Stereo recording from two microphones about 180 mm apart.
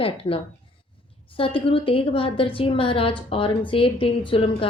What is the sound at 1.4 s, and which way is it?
A woman's voice, 30° left (ahead or behind).